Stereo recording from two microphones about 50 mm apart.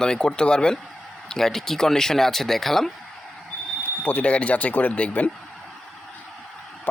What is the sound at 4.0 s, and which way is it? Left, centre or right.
Speech, left.